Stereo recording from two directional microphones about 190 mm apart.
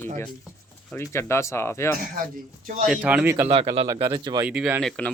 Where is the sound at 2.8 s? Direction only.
5° right (ahead or behind).